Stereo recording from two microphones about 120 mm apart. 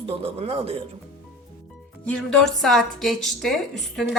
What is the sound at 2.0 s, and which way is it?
A woman's voice, 10° left (ahead or behind).